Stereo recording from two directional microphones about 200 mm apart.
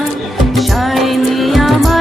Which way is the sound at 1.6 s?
Centre (ahead or behind).